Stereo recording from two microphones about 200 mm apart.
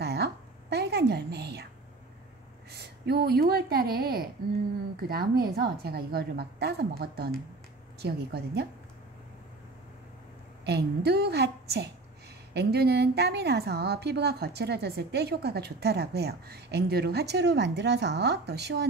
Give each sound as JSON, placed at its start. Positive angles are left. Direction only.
{"t": 0.0, "sound": "a sound", "side_deg": -55}
{"t": 2.7, "sound": "a woman's voice", "side_deg": -55}
{"t": 10.6, "sound": "a woman's voice", "side_deg": -55}